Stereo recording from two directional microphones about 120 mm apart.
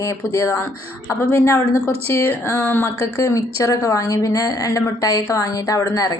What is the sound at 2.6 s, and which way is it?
Speech, 15° left (ahead or behind).